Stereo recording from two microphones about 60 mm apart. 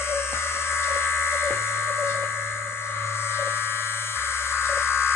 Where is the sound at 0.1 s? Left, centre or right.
Left.